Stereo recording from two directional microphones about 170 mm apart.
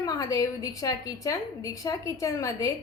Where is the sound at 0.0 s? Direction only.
20° left (ahead or behind).